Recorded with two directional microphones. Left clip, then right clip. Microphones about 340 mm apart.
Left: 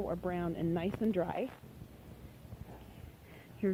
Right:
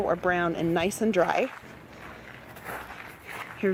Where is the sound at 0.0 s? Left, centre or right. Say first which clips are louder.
Right 12 dB; right.